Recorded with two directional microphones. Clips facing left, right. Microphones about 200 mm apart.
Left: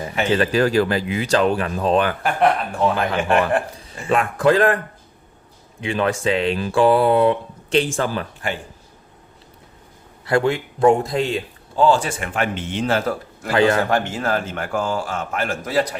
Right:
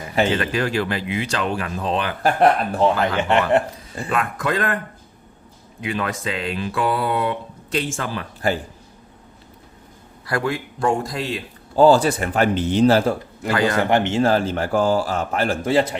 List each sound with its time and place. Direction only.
0.3 s speech: 35° left (ahead or behind)
2.2 s speech: 35° right (ahead or behind)
4.1 s speech: 30° left (ahead or behind)
5.8 s a man's voice: 30° left (ahead or behind)
10.2 s a man's voice: 25° left (ahead or behind)
11.8 s speech: 40° right (ahead or behind)
13.8 s speech: 20° right (ahead or behind)